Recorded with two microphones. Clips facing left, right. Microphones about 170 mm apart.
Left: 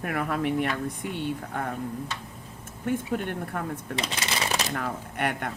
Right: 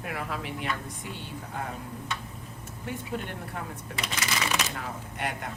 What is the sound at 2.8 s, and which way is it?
Speech, 50° left (ahead or behind).